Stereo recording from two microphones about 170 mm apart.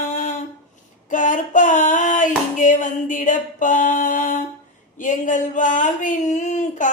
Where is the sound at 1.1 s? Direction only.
50° left (ahead or behind).